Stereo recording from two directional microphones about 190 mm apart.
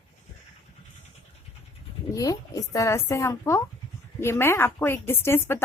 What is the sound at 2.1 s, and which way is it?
A woman's voice, 20° left (ahead or behind).